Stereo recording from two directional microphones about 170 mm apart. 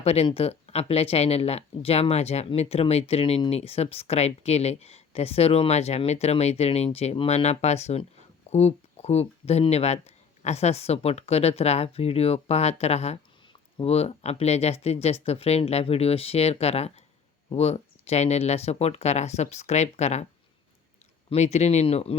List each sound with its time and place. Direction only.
0.0 s speech: 35° left (ahead or behind)
21.2 s speech: 40° left (ahead or behind)